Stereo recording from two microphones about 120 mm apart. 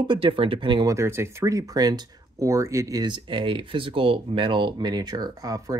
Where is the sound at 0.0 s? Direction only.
45° right (ahead or behind).